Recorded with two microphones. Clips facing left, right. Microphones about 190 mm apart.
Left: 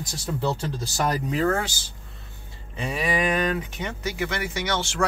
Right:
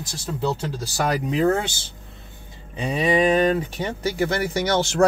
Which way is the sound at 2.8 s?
25° right (ahead or behind).